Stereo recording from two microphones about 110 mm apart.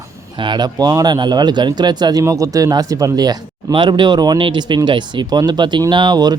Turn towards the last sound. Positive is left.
turn(degrees=-40)  # may be behind; listen again after turning